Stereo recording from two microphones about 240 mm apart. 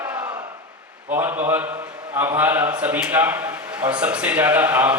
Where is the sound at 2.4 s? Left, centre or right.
Centre.